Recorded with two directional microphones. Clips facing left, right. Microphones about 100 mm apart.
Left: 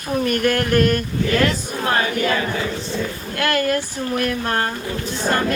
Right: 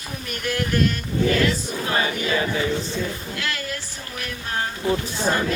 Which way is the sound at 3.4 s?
55° left (ahead or behind).